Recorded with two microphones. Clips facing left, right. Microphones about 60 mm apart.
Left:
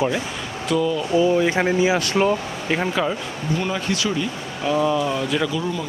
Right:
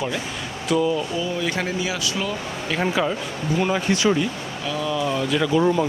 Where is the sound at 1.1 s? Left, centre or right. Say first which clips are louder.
Left 7 dB; left.